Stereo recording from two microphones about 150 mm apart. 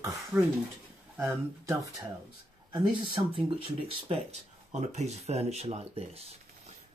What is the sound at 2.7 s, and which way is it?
Speech, 35° right (ahead or behind).